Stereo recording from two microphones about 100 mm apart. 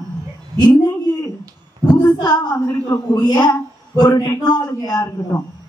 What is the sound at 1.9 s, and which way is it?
A woman's voice, 40° left (ahead or behind).